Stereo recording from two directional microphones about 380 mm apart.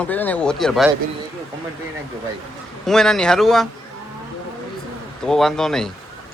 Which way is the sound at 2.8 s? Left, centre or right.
Centre.